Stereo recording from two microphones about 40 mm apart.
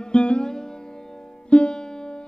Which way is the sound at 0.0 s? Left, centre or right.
Left.